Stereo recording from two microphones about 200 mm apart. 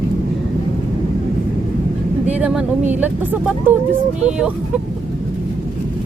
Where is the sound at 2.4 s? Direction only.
5° right (ahead or behind).